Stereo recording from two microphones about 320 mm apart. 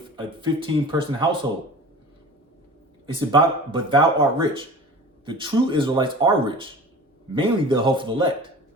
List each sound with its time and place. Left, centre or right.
0.3 s speech: centre
3.2 s speech: centre